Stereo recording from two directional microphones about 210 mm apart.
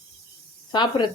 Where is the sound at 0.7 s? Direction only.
20° left (ahead or behind).